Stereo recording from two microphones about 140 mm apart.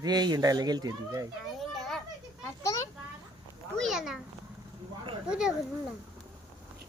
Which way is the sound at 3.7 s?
Centre (ahead or behind).